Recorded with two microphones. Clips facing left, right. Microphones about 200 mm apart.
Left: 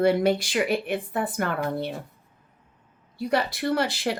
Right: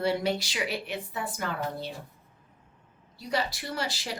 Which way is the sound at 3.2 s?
55° left (ahead or behind).